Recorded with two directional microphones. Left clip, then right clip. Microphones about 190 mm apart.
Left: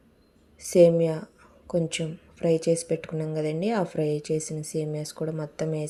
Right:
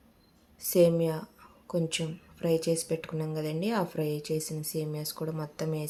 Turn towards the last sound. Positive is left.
turn(degrees=15)  # may be behind; listen again after turning